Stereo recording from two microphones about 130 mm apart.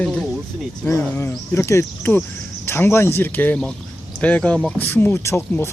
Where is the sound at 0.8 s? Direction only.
20° left (ahead or behind).